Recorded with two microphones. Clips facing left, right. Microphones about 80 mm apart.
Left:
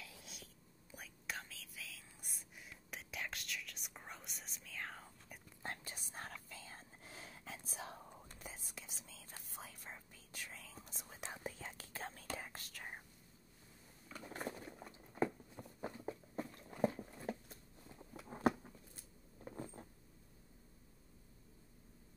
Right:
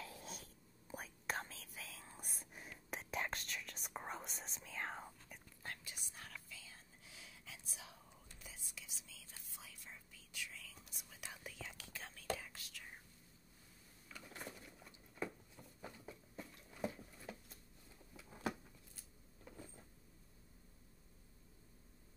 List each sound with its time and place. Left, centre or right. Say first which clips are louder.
0.0 s whispering: right 5 dB; right
4.6 s whispering: right 3 dB; right
5.9 s whispering: left 6 dB; left
14.0 s patter: left 6 dB; left
18.2 s a sound: left 9 dB; left
19.4 s vehicle: left 7 dB; left